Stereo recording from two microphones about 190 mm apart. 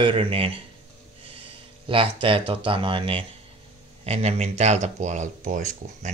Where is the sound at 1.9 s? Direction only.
30° right (ahead or behind).